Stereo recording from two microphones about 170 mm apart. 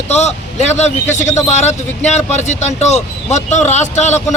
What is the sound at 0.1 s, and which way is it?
A man's voice, 40° left (ahead or behind).